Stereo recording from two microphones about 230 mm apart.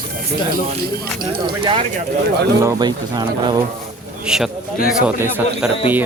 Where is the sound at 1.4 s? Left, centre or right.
Right.